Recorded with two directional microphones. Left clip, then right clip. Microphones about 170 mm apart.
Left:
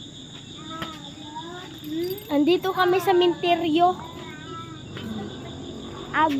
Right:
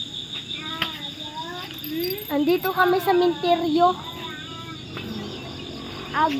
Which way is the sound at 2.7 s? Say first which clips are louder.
Right 1 dB; 10° left (ahead or behind).